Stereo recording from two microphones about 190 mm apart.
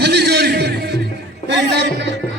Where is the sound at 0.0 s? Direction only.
60° right (ahead or behind).